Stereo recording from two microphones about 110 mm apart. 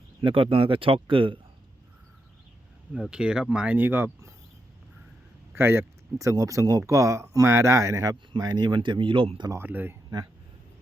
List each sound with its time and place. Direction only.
0.2 s speech: 50° right (ahead or behind)
2.9 s speech: 5° right (ahead or behind); by 4.4 s 25° right (ahead or behind)
5.5 s speech: 20° right (ahead or behind); by 9.5 s 55° right (ahead or behind)
9.5 s speech: 20° right (ahead or behind)